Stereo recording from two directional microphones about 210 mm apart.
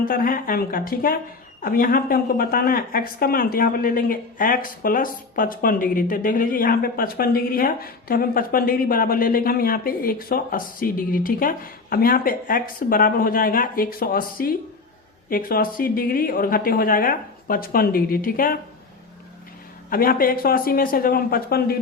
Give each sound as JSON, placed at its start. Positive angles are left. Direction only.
{"t": 0.0, "sound": "speech", "side_deg": 40}
{"t": 19.9, "sound": "speech", "side_deg": 45}